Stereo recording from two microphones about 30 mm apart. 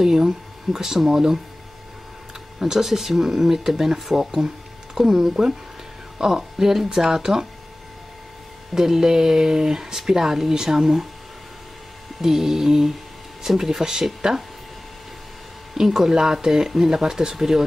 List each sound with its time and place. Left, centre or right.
0.0 s speech: centre
2.6 s speech: centre
8.7 s speech: centre
12.2 s speech: centre
15.7 s speech: centre